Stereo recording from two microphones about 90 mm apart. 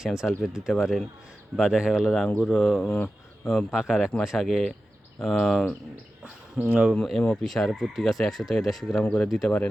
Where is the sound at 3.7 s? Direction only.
5° right (ahead or behind).